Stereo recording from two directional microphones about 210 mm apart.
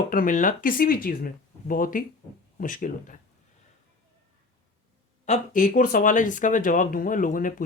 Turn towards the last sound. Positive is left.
turn(degrees=40)  # may be behind; listen again after turning